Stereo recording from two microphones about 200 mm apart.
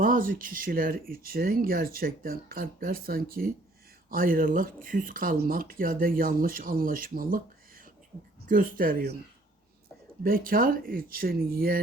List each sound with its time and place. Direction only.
0.0 s speech: 45° right (ahead or behind)
8.4 s speech: 45° right (ahead or behind)
10.2 s speech: 45° right (ahead or behind)